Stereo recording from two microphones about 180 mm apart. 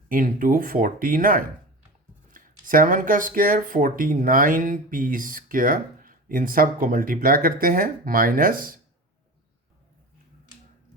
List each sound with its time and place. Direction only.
0.1 s speech: 50° right (ahead or behind)